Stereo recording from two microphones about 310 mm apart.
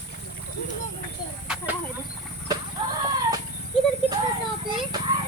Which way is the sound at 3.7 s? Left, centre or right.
Centre.